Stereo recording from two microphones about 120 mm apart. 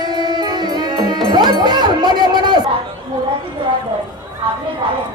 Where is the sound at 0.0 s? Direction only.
35° right (ahead or behind).